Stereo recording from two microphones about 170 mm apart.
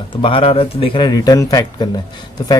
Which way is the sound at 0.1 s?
30° left (ahead or behind).